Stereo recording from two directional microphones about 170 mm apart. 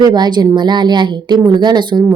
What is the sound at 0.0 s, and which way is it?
A woman's voice, 25° right (ahead or behind).